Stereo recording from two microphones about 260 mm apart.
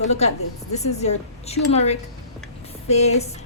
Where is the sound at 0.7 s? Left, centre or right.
Left.